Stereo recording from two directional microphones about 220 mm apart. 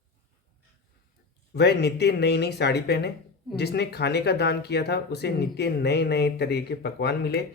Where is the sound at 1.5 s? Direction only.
50° left (ahead or behind).